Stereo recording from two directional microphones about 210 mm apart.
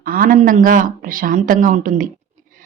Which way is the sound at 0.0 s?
45° right (ahead or behind).